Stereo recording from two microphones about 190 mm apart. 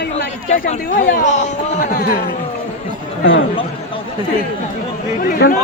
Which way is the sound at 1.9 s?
50° left (ahead or behind).